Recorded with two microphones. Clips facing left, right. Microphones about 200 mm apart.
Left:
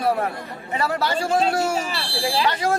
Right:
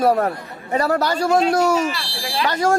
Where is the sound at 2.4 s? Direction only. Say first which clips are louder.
Right 8 dB; 45° right (ahead or behind).